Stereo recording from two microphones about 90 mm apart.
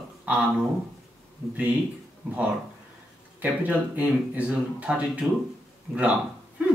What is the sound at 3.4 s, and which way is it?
Speech, 15° right (ahead or behind).